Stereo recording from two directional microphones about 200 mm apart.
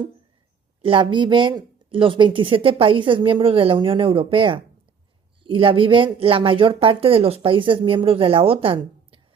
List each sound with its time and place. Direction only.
0.8 s speech: 25° right (ahead or behind)